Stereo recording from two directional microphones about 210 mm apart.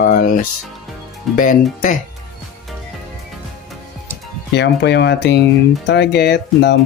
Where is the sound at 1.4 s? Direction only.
40° left (ahead or behind).